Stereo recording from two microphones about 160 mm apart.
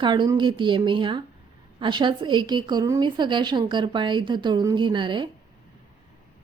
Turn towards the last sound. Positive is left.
turn(degrees=-30)  # may be behind; listen again after turning